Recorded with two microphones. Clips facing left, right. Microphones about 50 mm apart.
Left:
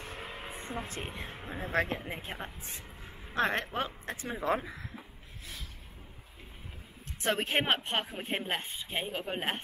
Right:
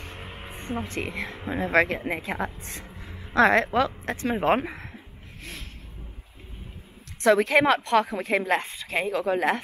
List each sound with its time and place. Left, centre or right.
0.5 s music: right
1.0 s speech: right
1.4 s a woman's voice: right
2.0 s a woman's voice: right
5.4 s a sound: right
7.2 s a woman's voice: right